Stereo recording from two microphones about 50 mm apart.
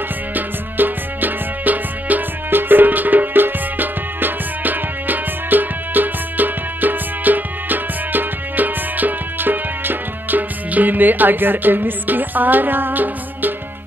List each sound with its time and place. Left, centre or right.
0.3 s music: right